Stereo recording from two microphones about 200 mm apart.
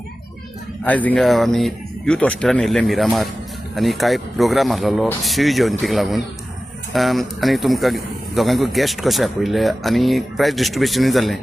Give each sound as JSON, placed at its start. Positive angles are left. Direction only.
{"t": 0.9, "sound": "a man's voice", "side_deg": 5}